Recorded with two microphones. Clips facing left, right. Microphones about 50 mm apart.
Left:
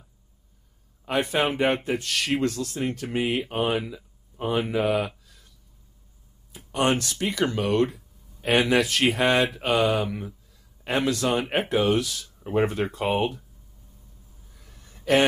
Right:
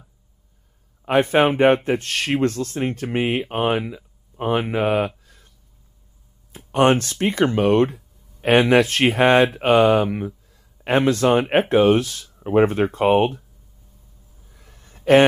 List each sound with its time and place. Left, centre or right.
1.0 s speech: right
6.5 s speech: right
14.6 s a sound: right